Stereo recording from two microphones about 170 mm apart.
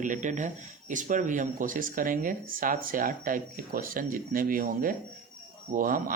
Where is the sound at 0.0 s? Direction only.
45° right (ahead or behind).